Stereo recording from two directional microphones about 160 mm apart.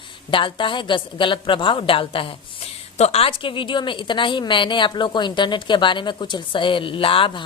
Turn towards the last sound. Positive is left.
turn(degrees=30)  # may be behind; listen again after turning